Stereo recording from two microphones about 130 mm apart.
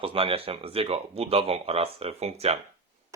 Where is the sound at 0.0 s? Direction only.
45° right (ahead or behind).